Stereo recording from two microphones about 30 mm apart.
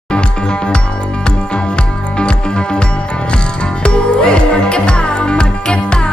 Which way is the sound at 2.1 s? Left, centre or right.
Left.